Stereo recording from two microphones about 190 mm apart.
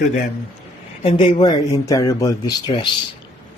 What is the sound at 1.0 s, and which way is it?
Speech, 25° left (ahead or behind).